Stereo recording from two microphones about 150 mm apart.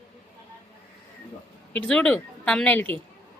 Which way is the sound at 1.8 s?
5° left (ahead or behind).